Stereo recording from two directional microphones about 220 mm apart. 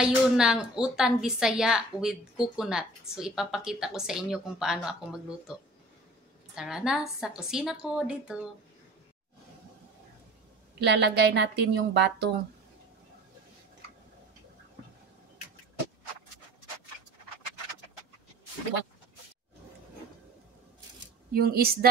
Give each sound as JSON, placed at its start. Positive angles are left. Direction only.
{"t": 0.0, "sound": "a woman's voice", "side_deg": -5}
{"t": 10.8, "sound": "a woman's voice", "side_deg": -50}
{"t": 21.3, "sound": "a woman's voice", "side_deg": -45}